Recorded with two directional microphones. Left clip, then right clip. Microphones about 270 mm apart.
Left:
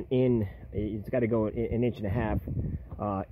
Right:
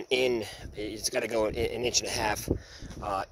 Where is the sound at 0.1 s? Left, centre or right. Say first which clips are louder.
Even; centre.